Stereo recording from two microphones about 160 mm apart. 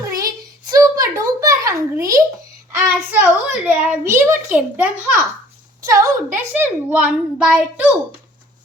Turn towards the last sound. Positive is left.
turn(degrees=-10)  # may be behind; listen again after turning